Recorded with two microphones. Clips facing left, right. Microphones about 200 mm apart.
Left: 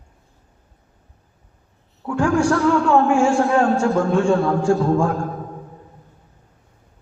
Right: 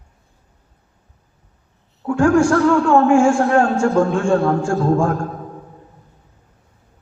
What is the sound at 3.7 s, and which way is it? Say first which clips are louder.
A man's voice: right 1 dB; 50° right (ahead or behind).